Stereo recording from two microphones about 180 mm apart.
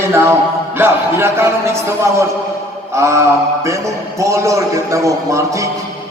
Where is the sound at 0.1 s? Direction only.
15° right (ahead or behind).